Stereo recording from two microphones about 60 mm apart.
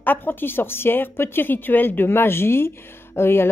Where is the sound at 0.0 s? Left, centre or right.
Left.